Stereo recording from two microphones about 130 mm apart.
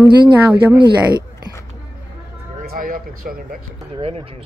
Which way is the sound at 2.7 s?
90° right.